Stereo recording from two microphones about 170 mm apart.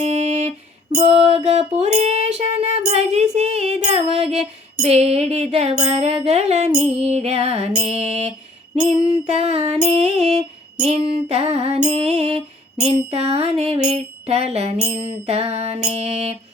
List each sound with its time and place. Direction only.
0.0 s music: 40° right (ahead or behind)